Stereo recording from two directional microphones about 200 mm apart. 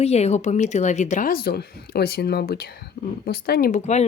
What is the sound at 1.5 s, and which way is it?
Speech, 50° left (ahead or behind).